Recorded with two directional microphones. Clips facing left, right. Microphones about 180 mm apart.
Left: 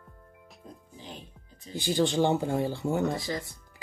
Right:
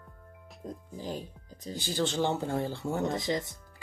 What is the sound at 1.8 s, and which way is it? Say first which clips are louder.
Speech: left 5 dB; 15° left (ahead or behind).